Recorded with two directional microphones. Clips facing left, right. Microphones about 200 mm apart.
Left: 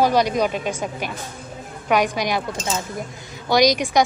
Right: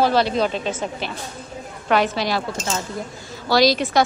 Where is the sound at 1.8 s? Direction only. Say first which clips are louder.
Even; 15° left (ahead or behind).